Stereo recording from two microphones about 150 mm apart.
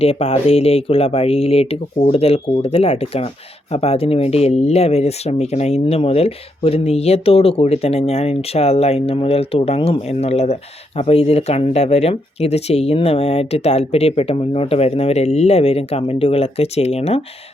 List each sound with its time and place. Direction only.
0.0 s speech: 40° left (ahead or behind)